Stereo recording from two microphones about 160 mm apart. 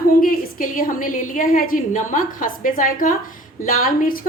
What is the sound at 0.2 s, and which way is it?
A woman's voice, 60° left (ahead or behind).